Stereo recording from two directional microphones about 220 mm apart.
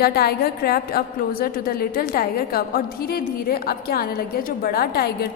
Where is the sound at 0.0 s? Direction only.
45° left (ahead or behind).